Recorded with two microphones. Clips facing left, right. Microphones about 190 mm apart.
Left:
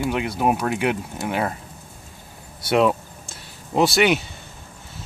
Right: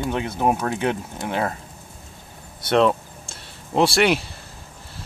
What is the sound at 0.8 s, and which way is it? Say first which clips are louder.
Speech: left 1 dB; 10° left (ahead or behind).